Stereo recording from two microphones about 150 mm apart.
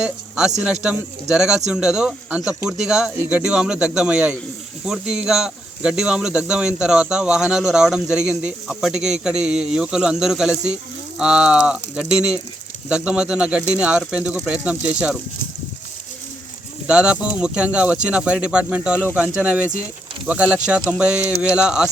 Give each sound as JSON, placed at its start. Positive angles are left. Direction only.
{"t": 0.0, "sound": "speech", "side_deg": -5}
{"t": 16.8, "sound": "speech", "side_deg": -10}